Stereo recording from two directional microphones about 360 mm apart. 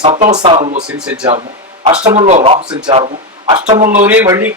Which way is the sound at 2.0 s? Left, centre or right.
Centre.